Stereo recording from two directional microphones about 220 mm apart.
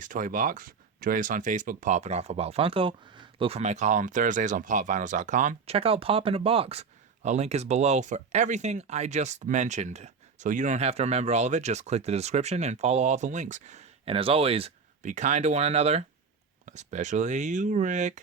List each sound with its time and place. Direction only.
0.0 s speech: 35° right (ahead or behind)